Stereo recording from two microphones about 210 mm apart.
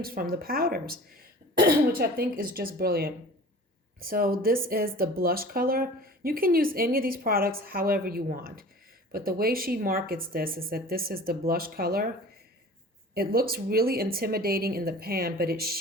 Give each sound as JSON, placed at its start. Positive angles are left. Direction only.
{"t": 0.0, "sound": "speech", "side_deg": -45}
{"t": 13.1, "sound": "speech", "side_deg": -45}